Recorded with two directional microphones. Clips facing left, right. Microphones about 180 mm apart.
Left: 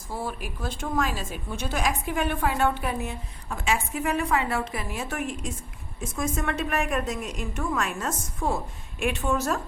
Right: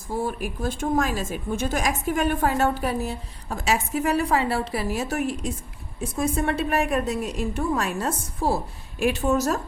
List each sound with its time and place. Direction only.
0.1 s a woman's voice: 45° right (ahead or behind)